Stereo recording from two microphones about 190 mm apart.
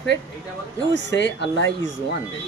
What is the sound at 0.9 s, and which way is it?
Speech, 70° left (ahead or behind).